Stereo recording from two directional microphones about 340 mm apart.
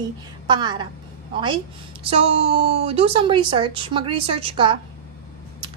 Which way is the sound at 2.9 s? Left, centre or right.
Centre.